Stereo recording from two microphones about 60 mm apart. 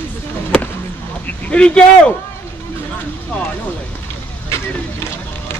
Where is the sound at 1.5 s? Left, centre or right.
Centre.